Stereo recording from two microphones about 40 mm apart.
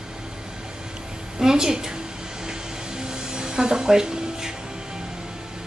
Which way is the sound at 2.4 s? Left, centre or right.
Centre.